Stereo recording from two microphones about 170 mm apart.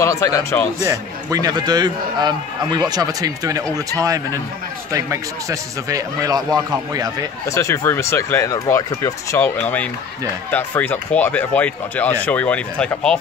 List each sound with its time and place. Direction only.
0.0 s speech: 15° left (ahead or behind)
0.8 s a man's voice: 20° right (ahead or behind)
7.4 s speech: 15° left (ahead or behind)